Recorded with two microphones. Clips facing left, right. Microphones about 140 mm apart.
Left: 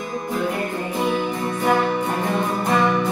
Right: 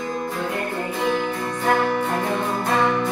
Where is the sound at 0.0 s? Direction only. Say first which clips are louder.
Left 2 dB; 20° left (ahead or behind).